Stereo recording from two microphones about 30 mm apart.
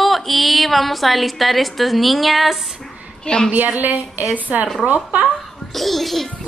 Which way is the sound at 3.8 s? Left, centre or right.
Right.